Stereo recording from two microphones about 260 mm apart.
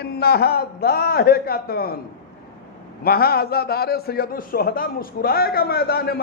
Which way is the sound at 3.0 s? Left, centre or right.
Left.